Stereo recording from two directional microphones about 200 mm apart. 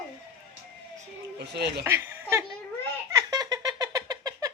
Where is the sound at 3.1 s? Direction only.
15° right (ahead or behind).